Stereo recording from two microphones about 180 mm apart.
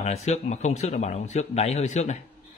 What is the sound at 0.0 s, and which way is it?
Speech, 35° left (ahead or behind).